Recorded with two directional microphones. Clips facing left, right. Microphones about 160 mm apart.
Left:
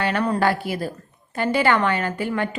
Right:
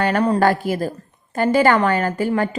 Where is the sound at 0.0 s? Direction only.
40° right (ahead or behind).